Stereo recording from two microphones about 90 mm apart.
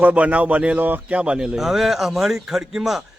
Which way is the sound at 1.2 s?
10° right (ahead or behind).